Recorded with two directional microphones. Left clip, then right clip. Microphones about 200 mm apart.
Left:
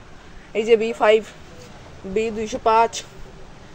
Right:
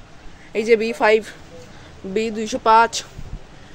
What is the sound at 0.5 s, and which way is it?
A woman's voice, 25° right (ahead or behind).